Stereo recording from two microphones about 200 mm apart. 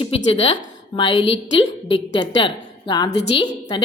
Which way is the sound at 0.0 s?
25° left (ahead or behind).